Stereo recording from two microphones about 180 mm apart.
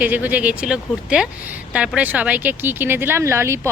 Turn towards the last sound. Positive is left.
turn(degrees=-15)  # may be behind; listen again after turning